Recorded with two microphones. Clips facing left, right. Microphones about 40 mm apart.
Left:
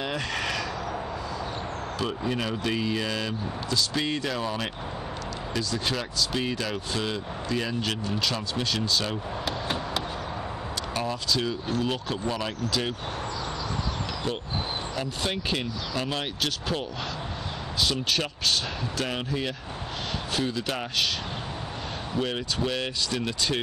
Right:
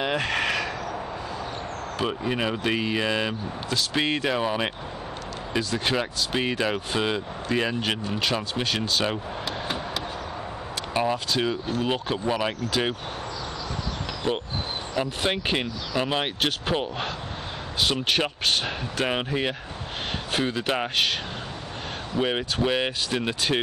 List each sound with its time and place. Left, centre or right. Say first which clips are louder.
0.0 s a sound: right 5 dB; right
2.0 s speech: right 3 dB; right
8.2 s speech: right 2 dB; right
11.0 s speech: right 4 dB; right
15.0 s speech: right 7 dB; right
17.9 s speech: right 3 dB; right
22.2 s speech: right 5 dB; right